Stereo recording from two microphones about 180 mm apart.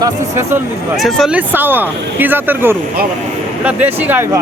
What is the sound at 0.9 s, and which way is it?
Speech, centre (ahead or behind).